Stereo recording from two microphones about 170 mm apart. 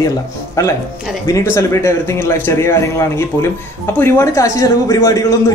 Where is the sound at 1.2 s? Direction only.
15° left (ahead or behind).